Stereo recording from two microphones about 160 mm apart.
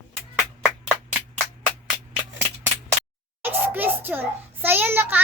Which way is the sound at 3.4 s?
10° right (ahead or behind).